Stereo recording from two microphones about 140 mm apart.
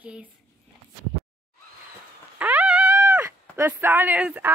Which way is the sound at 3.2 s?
15° right (ahead or behind).